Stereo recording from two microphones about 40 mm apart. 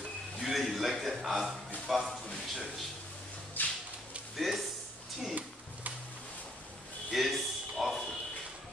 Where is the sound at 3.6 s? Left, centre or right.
Left.